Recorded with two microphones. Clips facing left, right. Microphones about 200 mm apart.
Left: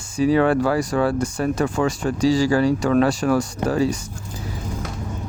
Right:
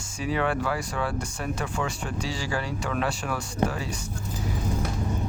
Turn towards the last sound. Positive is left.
turn(degrees=40)  # may be behind; listen again after turning